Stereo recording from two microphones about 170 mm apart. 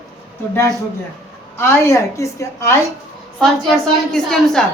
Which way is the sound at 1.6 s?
15° left (ahead or behind).